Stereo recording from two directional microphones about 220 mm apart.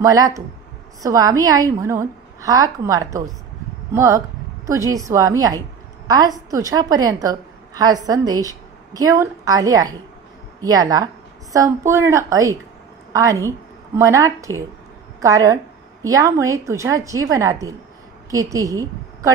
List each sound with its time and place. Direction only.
0.1 s a woman's voice: 15° right (ahead or behind)